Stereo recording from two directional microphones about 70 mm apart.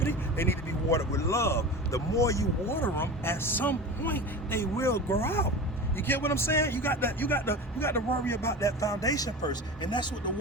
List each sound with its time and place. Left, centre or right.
0.0 s speech: left
2.6 s speech: left